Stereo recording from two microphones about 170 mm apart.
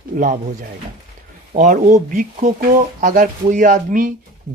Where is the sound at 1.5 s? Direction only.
45° right (ahead or behind).